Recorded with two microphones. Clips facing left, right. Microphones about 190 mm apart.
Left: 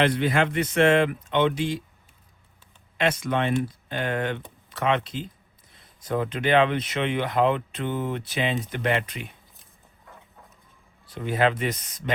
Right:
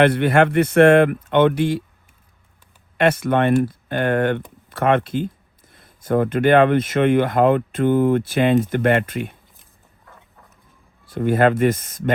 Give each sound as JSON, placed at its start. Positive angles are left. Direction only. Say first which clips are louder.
{"t": 0.0, "sound": "speech", "louder": "right 7 dB", "side_deg": -60}
{"t": 3.0, "sound": "speech", "louder": "right 7 dB", "side_deg": -55}
{"t": 11.0, "sound": "speech", "louder": "right 7 dB", "side_deg": -50}